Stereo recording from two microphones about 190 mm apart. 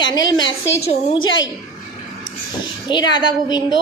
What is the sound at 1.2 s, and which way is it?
Speech, 90° left.